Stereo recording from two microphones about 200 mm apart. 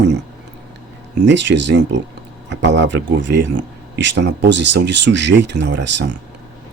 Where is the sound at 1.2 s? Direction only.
65° right (ahead or behind).